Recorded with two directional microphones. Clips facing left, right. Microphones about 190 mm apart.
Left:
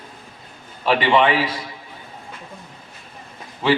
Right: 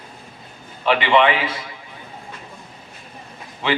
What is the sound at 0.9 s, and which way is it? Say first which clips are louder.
Speech: even; 35° left (ahead or behind).